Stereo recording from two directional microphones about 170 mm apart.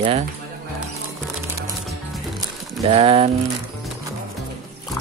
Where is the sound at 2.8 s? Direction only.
35° right (ahead or behind).